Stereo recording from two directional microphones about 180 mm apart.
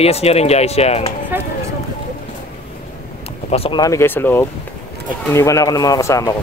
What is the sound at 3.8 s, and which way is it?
Speech, 15° left (ahead or behind).